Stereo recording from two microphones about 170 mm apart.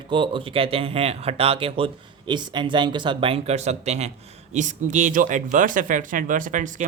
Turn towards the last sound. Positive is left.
turn(degrees=-50)  # may be behind; listen again after turning